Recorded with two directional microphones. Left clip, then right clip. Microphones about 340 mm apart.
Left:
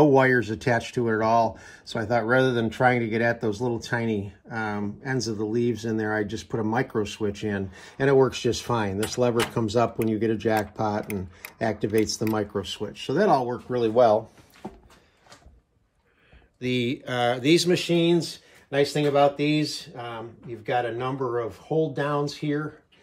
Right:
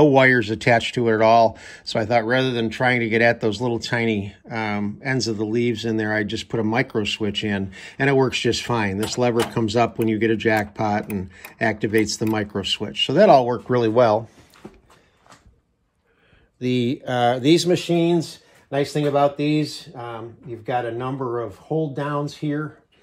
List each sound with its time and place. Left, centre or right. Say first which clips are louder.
0.0 s speech: right 4 dB; centre
13.7 s speech: left 1 dB; centre
16.5 s speech: right 4 dB; centre